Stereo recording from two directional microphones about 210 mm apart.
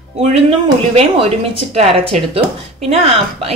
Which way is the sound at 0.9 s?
30° right (ahead or behind).